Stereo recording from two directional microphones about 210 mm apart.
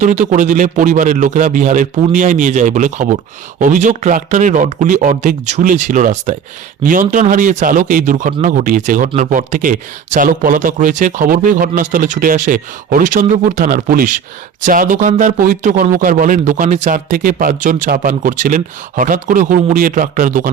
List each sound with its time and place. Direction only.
0.0 s speech: 35° right (ahead or behind)